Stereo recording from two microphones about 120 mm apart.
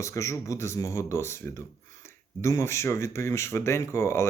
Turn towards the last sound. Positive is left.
turn(degrees=25)  # may be behind; listen again after turning